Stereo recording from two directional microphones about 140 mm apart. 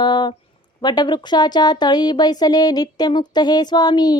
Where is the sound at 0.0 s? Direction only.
30° left (ahead or behind).